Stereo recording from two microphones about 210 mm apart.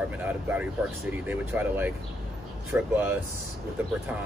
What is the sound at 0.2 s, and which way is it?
Speech, 10° right (ahead or behind).